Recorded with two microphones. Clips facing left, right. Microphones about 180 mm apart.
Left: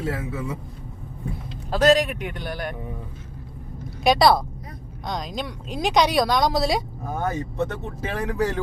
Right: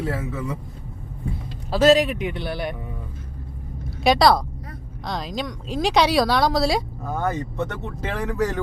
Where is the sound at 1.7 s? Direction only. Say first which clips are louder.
Right 2 dB; 5° right (ahead or behind).